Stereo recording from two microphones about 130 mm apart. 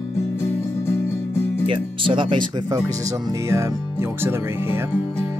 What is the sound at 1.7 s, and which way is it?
Speech, 40° right (ahead or behind).